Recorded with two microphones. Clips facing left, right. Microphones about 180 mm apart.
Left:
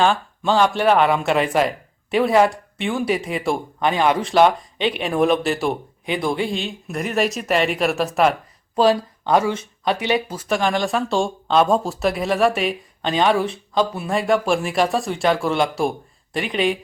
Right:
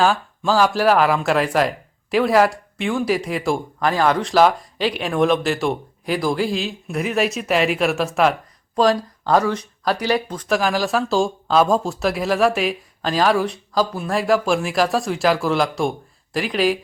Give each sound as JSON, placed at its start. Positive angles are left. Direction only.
{"t": 0.0, "sound": "speech", "side_deg": -5}
{"t": 9.4, "sound": "speech", "side_deg": 25}
{"t": 9.8, "sound": "speech", "side_deg": 0}